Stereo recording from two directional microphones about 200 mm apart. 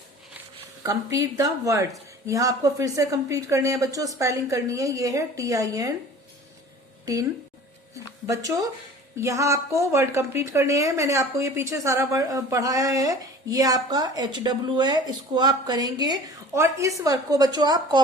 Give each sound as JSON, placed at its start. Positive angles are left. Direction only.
{"t": 0.8, "sound": "a woman's voice", "side_deg": -15}
{"t": 7.0, "sound": "a woman's voice", "side_deg": -20}
{"t": 8.3, "sound": "a woman's voice", "side_deg": -15}